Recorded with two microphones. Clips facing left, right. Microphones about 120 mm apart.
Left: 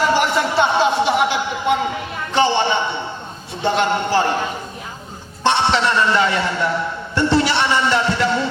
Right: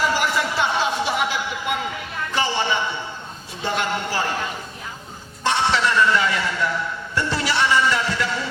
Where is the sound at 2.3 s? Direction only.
30° left (ahead or behind).